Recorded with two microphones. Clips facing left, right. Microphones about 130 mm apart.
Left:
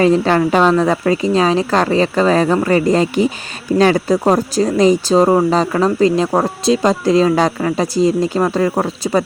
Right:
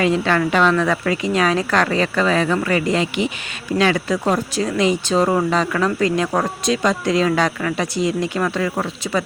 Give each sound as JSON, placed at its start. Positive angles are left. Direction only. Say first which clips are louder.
{"t": 0.0, "sound": "speech", "louder": "left 5 dB", "side_deg": 35}